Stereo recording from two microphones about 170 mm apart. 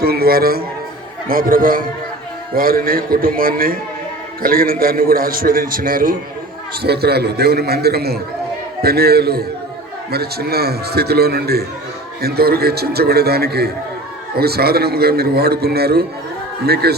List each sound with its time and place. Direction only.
0.0 s a man's voice: 65° right (ahead or behind)
6.8 s a man's voice: 70° right (ahead or behind)